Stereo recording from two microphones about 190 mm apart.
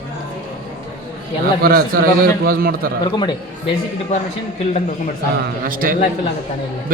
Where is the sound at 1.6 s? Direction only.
50° right (ahead or behind).